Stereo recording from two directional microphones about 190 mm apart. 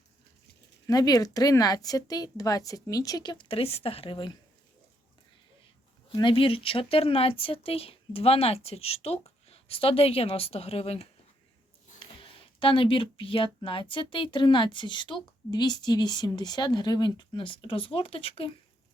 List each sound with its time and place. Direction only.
0.9 s speech: 20° left (ahead or behind)
6.1 s speech: 25° left (ahead or behind)